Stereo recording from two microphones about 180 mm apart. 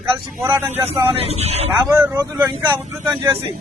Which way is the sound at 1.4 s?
35° right (ahead or behind).